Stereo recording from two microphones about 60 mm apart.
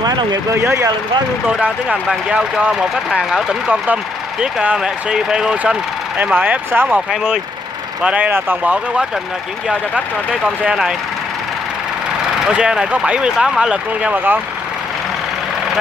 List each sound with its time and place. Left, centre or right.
2.2 s speech: centre
3.8 s speech: right
4.7 s speech: centre
5.6 s speech: right
8.0 s speech: centre
10.7 s speech: centre
12.4 s speech: centre
14.1 s speech: right